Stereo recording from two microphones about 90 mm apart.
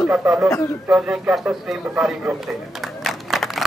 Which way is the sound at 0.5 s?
35° left (ahead or behind).